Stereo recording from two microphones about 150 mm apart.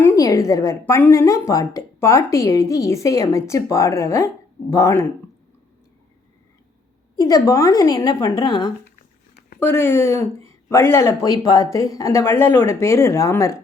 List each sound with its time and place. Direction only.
0.0 s speech: 20° left (ahead or behind)
7.2 s speech: 25° left (ahead or behind)
9.6 s speech: 15° left (ahead or behind)